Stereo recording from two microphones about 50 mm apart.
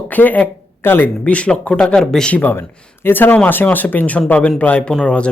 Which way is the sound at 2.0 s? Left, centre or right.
Centre.